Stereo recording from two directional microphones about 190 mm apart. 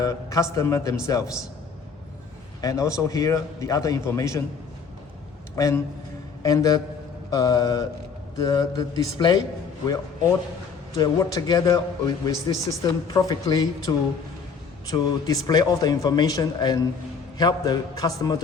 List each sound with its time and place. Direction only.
0.0 s a man's voice: 20° left (ahead or behind)
2.6 s a man's voice: 20° left (ahead or behind)
5.5 s a man's voice: 15° left (ahead or behind)